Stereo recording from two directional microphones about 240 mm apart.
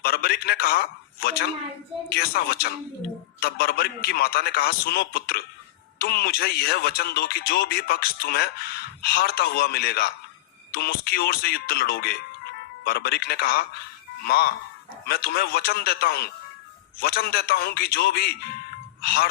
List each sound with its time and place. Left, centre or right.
0.0 s speech: left